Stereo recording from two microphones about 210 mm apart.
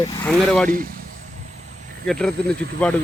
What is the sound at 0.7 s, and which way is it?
Speech, 45° right (ahead or behind).